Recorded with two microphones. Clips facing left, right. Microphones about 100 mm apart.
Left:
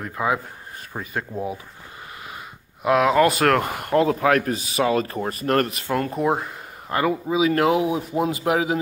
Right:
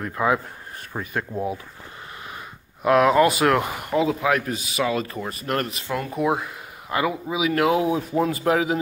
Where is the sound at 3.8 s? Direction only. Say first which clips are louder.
Left 5 dB; 55° left (ahead or behind).